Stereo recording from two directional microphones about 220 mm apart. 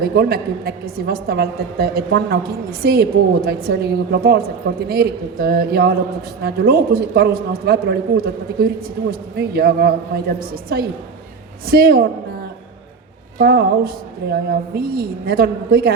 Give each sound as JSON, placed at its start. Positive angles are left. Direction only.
{"t": 0.0, "sound": "a woman's voice", "side_deg": -45}
{"t": 13.4, "sound": "a woman's voice", "side_deg": -45}